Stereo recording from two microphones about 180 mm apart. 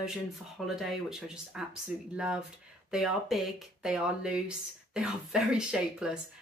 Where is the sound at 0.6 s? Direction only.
Centre (ahead or behind).